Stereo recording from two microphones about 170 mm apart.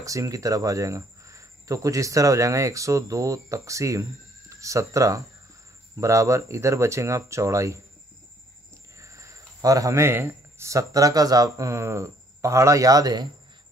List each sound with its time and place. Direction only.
0.0 s speech: 20° right (ahead or behind)
8.9 s speech: 15° right (ahead or behind)